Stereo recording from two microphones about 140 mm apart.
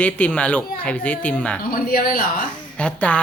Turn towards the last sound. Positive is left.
turn(degrees=10)  # may be behind; listen again after turning